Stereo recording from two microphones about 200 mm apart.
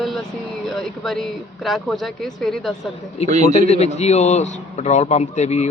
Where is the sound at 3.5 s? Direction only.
30° left (ahead or behind).